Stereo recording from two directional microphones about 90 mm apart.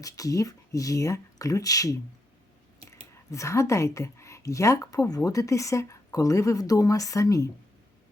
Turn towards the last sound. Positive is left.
turn(degrees=40)  # may be behind; listen again after turning